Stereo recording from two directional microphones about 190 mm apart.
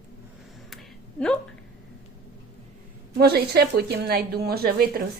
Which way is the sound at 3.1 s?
55° right (ahead or behind).